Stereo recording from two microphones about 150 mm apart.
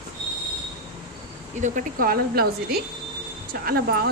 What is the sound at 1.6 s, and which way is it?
Speech, 75° right (ahead or behind).